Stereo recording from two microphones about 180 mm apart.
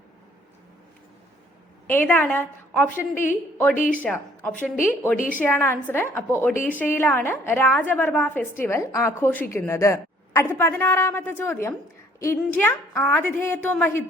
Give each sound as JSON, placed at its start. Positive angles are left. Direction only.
{"t": 1.9, "sound": "a woman's voice", "side_deg": 10}
{"t": 5.1, "sound": "a woman's voice", "side_deg": 50}
{"t": 5.4, "sound": "a woman's voice", "side_deg": 15}